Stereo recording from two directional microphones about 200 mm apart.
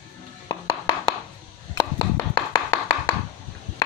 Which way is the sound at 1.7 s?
20° left (ahead or behind).